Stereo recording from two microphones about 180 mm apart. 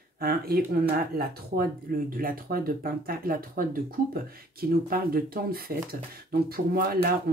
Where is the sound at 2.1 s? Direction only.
50° right (ahead or behind).